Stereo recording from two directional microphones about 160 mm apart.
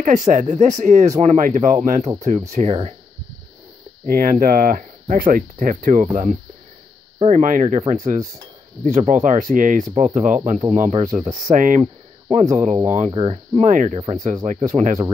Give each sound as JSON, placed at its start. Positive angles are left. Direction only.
{"t": 0.0, "sound": "speech", "side_deg": -50}
{"t": 4.0, "sound": "speech", "side_deg": -65}
{"t": 13.1, "sound": "speech", "side_deg": -30}
{"t": 13.6, "sound": "speech", "side_deg": -50}